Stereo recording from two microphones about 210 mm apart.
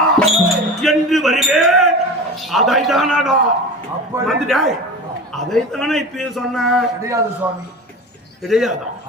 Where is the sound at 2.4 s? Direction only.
Centre (ahead or behind).